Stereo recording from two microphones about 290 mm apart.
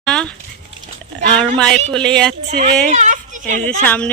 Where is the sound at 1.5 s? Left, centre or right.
Centre.